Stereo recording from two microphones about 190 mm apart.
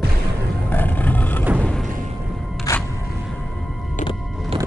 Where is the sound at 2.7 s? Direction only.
20° left (ahead or behind).